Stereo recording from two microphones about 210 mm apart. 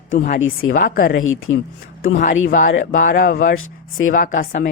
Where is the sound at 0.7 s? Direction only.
45° left (ahead or behind).